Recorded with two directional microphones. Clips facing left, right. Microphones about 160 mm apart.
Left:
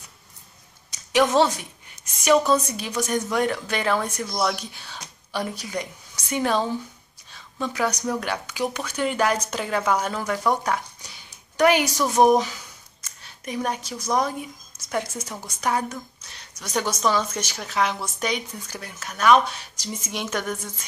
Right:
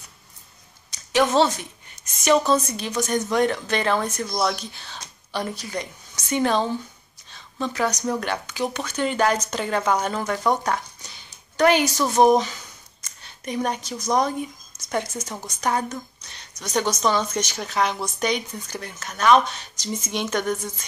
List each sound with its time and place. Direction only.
1.3 s a woman's voice: 10° left (ahead or behind)